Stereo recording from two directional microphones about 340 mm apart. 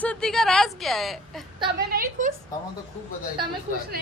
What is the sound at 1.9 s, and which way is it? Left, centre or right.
Speech, right.